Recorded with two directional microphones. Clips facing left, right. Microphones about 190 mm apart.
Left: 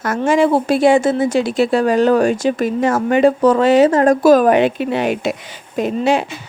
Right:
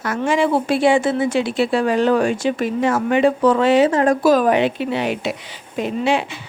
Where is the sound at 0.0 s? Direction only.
45° left (ahead or behind).